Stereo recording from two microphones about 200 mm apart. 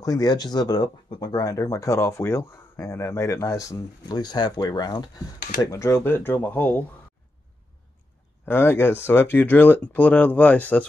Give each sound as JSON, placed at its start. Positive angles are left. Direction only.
{"t": 0.0, "sound": "speech", "side_deg": 20}
{"t": 8.5, "sound": "speech", "side_deg": 10}